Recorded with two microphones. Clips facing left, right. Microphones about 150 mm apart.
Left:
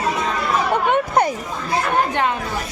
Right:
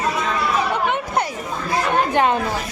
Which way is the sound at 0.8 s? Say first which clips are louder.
Left 4 dB; 50° left (ahead or behind).